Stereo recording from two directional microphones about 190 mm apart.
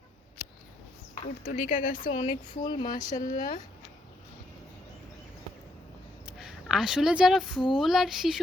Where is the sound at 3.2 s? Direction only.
45° left (ahead or behind).